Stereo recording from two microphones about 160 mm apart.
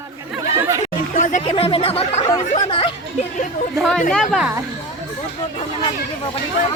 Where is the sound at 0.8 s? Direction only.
50° left (ahead or behind); by 3.3 s 35° left (ahead or behind).